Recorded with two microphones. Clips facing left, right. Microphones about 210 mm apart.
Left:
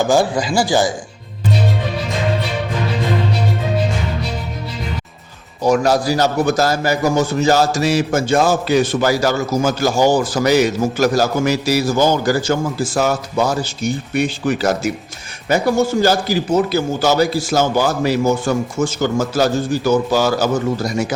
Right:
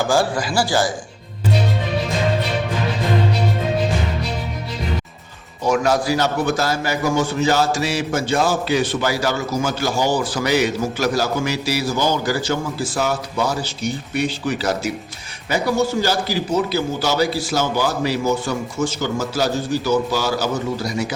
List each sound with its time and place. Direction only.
0.1 s a man's voice: 20° left (ahead or behind)
5.6 s a man's voice: 35° left (ahead or behind)